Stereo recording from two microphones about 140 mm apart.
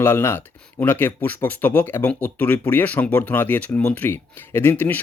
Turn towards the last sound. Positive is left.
turn(degrees=15)  # may be behind; listen again after turning